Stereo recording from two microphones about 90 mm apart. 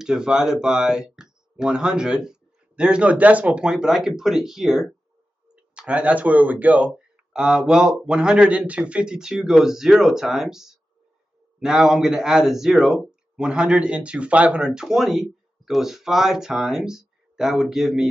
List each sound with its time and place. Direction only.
0.0 s a man's voice: 5° right (ahead or behind)